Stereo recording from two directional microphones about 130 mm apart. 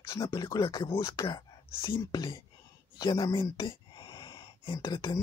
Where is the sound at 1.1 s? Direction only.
35° left (ahead or behind).